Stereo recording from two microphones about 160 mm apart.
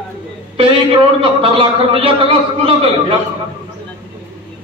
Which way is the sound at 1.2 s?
35° right (ahead or behind).